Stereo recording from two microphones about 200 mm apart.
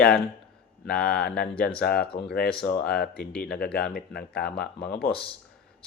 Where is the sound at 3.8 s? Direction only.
50° left (ahead or behind).